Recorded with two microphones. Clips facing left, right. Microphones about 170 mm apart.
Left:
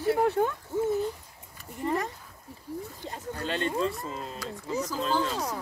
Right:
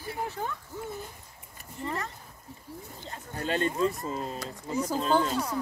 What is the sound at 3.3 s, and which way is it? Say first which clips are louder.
Speech: right 2 dB; 45° right (ahead or behind).